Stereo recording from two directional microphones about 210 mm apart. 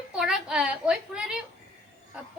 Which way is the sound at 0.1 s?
5° right (ahead or behind).